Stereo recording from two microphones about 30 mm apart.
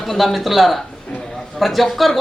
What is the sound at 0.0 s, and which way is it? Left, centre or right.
A man's voice, centre.